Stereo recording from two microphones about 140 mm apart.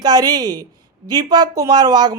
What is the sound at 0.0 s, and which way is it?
A woman's voice, 30° right (ahead or behind).